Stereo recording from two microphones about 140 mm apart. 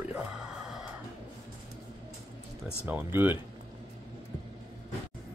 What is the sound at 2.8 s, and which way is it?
Speech, 15° right (ahead or behind).